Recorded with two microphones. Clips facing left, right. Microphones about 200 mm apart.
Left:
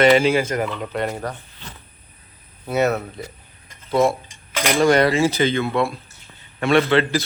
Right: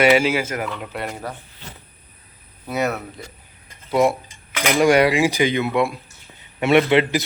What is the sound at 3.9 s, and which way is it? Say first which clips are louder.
A man's voice: even; 15° right (ahead or behind).